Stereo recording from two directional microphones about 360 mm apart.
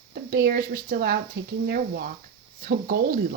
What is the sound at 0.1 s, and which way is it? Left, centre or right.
Speech, right.